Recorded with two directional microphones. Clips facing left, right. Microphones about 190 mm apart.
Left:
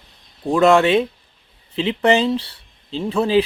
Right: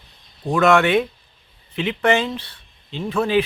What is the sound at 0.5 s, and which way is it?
Speech, 30° left (ahead or behind).